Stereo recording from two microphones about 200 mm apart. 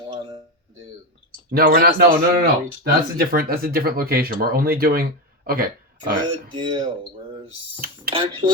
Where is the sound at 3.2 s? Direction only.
50° right (ahead or behind).